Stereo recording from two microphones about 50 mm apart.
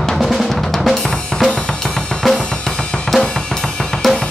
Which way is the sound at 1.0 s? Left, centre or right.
Centre.